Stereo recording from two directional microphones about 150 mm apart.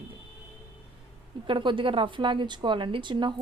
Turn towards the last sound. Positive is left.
turn(degrees=-30)  # may be behind; listen again after turning